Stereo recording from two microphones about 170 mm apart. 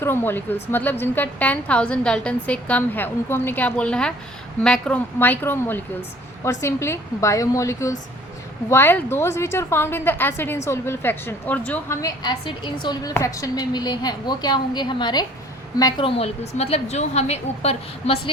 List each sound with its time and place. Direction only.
0.0 s a woman's voice: 15° left (ahead or behind)
12.0 s a woman's voice: 25° left (ahead or behind)